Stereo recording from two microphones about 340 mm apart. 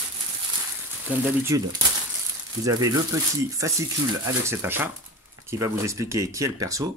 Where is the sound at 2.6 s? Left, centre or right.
Centre.